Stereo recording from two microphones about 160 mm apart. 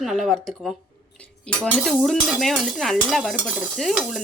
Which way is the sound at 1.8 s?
Centre (ahead or behind).